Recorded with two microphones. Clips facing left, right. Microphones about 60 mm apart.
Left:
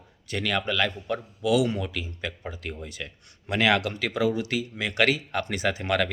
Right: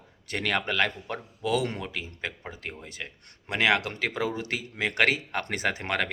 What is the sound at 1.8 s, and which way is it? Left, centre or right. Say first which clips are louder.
Speech: left 2 dB; right.